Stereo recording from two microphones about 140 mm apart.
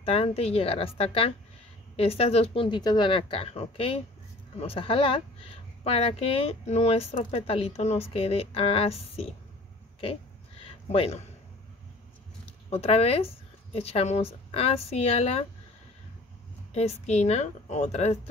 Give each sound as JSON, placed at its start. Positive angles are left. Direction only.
{"t": 0.0, "sound": "a woman's voice", "side_deg": 45}
{"t": 10.6, "sound": "a sound", "side_deg": 45}
{"t": 12.4, "sound": "speech", "side_deg": 50}
{"t": 16.7, "sound": "a woman's voice", "side_deg": 50}